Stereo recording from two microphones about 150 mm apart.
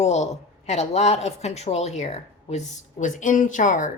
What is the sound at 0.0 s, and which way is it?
A woman's voice, 45° left (ahead or behind).